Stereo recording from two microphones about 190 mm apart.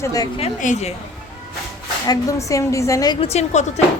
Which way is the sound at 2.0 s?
15° left (ahead or behind).